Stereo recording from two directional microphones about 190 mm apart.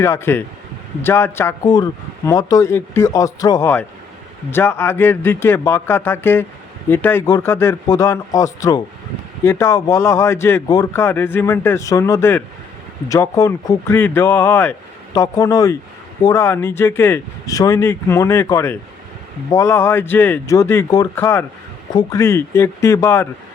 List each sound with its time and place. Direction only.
0.0 s speech: 15° left (ahead or behind)